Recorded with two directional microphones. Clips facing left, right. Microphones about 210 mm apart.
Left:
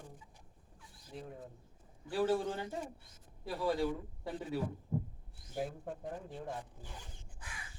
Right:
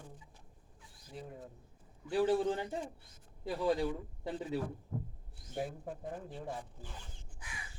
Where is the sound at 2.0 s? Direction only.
20° right (ahead or behind).